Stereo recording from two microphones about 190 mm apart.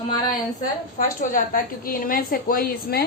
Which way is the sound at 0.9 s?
45° left (ahead or behind).